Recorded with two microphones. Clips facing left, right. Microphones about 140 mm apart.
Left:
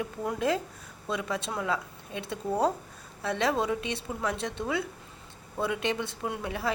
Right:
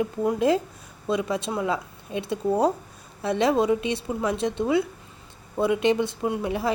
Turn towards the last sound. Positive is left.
turn(degrees=-20)  # may be behind; listen again after turning